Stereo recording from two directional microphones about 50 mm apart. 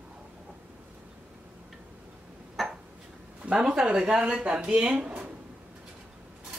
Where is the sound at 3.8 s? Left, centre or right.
Centre.